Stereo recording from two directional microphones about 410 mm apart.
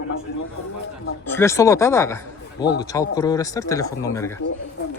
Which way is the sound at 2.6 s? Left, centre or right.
Left.